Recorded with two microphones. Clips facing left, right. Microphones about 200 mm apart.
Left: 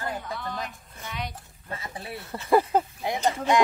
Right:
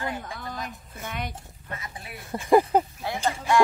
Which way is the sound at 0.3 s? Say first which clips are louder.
Left 2 dB; 45° right (ahead or behind).